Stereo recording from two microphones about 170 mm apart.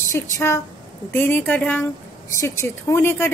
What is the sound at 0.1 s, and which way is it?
A woman's voice, 15° left (ahead or behind).